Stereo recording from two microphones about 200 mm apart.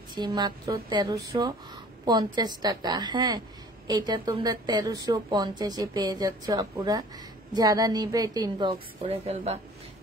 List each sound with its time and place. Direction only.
0.1 s a woman's voice: 20° right (ahead or behind)